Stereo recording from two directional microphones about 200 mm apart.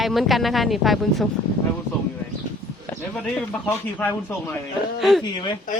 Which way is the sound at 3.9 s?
10° left (ahead or behind).